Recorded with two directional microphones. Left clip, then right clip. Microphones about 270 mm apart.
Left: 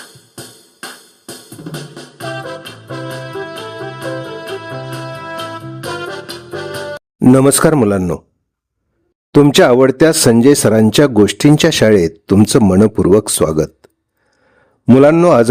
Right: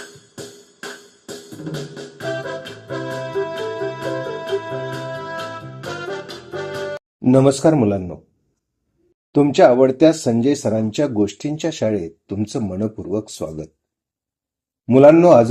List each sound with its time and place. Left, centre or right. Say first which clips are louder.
0.4 s music: left 3 dB; left
9.3 s speech: left 4 dB; left
14.9 s speech: left 1 dB; left